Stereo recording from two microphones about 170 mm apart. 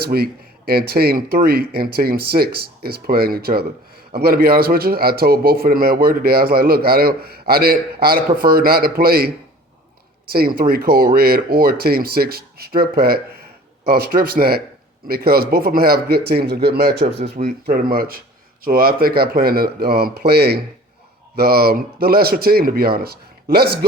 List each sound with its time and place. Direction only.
0.0 s speech: 65° right (ahead or behind)
17.3 s speech: 55° right (ahead or behind)